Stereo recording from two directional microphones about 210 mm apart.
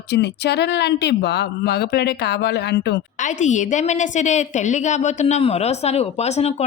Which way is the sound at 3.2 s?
35° left (ahead or behind).